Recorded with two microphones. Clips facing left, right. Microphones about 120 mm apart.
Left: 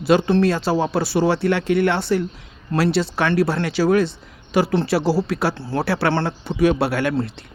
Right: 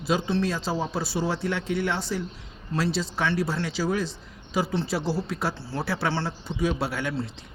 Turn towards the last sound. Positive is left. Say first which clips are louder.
# left 8 dB
turn(degrees=65)  # may be behind; listen again after turning